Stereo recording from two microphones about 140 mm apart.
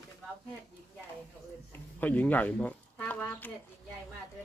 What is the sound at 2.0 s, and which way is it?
Speech, 10° left (ahead or behind).